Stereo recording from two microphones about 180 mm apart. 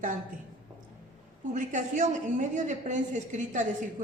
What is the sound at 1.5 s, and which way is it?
A woman's voice, 45° right (ahead or behind).